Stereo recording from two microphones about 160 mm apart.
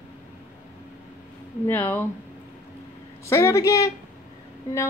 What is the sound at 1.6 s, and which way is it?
Speech, 10° left (ahead or behind).